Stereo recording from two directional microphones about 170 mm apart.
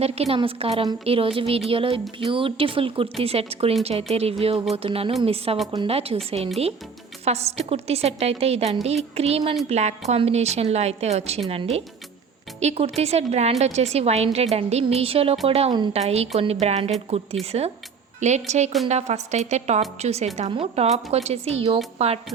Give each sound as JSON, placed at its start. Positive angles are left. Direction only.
{"t": 0.0, "sound": "a woman's voice", "side_deg": -35}
{"t": 7.3, "sound": "a woman's voice", "side_deg": -40}